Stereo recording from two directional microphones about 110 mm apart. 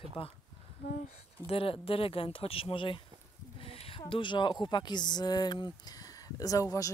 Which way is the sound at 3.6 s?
60° left (ahead or behind).